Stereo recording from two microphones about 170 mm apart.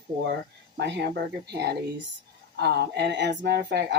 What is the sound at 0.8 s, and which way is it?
Speech, 90° right.